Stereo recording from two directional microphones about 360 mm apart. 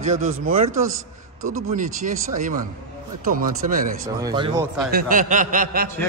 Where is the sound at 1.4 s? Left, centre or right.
Right.